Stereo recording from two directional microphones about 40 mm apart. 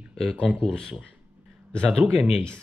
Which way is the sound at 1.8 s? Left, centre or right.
Centre.